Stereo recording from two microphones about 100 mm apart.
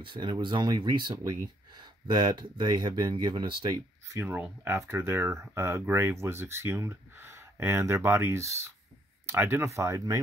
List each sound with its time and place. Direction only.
0.0 s speech: 50° right (ahead or behind)
4.1 s speech: 20° right (ahead or behind)